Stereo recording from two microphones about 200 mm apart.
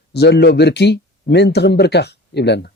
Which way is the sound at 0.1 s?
55° left (ahead or behind).